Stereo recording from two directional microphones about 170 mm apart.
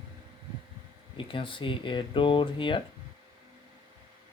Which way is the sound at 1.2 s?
30° left (ahead or behind).